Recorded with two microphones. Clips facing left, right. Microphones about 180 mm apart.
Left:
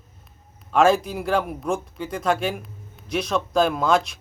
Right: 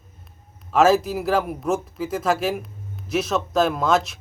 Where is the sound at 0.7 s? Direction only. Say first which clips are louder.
Right 1 dB; 5° right (ahead or behind).